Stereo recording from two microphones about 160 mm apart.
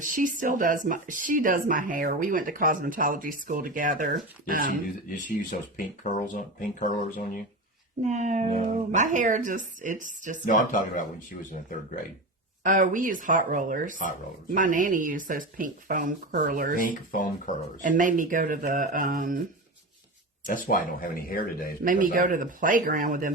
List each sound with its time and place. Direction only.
0.0 s speech: 55° right (ahead or behind)
5.0 s speech: 60° left (ahead or behind)
8.0 s speech: 45° right (ahead or behind)
10.4 s speech: 60° left (ahead or behind)
12.6 s speech: 55° right (ahead or behind)
16.7 s speech: 60° left (ahead or behind)
17.8 s speech: 55° right (ahead or behind)
20.5 s speech: 60° left (ahead or behind)
21.8 s speech: 55° right (ahead or behind)